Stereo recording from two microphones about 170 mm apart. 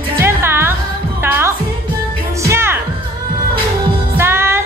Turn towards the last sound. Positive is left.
turn(degrees=-15)  # may be behind; listen again after turning